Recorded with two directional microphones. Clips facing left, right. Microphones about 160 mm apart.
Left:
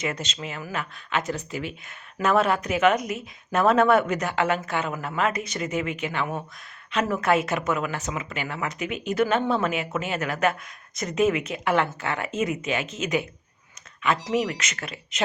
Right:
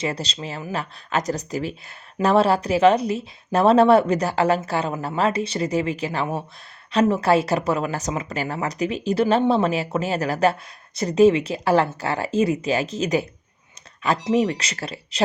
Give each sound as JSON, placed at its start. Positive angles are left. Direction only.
{"t": 0.0, "sound": "speech", "side_deg": -35}